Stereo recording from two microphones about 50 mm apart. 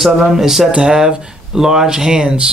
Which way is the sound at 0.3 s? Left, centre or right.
Centre.